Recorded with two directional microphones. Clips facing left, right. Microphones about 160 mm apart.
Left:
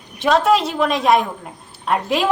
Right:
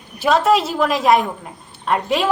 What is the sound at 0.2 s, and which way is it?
A woman's voice, centre (ahead or behind).